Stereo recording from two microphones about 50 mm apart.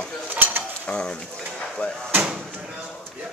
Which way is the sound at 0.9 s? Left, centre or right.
Centre.